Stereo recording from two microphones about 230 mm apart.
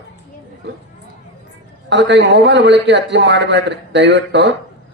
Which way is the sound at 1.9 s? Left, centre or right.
Right.